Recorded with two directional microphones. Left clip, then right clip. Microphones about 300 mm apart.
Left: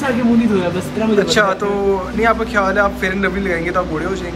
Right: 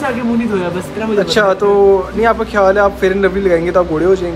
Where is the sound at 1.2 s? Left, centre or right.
Centre.